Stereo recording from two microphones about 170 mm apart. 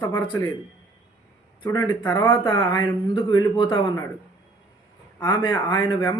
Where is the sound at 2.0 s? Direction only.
10° left (ahead or behind).